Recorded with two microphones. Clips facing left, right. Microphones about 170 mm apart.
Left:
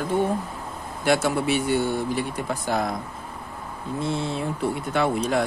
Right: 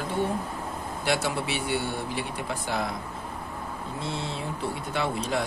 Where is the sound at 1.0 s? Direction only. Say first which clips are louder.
Left 6 dB; 50° left (ahead or behind).